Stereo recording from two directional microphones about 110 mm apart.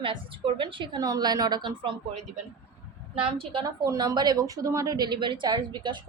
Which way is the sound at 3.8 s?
35° right (ahead or behind).